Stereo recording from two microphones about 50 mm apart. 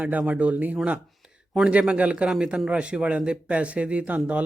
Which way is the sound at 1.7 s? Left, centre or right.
Right.